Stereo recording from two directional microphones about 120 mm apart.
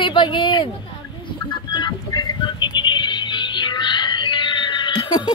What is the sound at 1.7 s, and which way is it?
Music, 35° left (ahead or behind).